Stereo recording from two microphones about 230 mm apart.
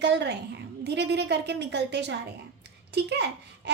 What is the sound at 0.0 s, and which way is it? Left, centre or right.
A woman's voice, right.